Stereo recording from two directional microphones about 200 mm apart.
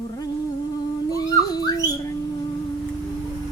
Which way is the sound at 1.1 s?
20° left (ahead or behind).